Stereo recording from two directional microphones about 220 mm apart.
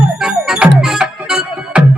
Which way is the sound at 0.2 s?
Centre (ahead or behind).